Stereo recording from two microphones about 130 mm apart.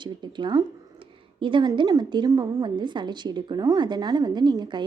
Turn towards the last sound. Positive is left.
turn(degrees=-35)  # may be behind; listen again after turning